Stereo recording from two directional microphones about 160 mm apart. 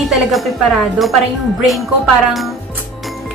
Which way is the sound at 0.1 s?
Centre (ahead or behind).